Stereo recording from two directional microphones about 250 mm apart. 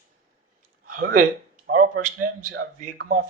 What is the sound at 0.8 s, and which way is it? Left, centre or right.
Speech, right.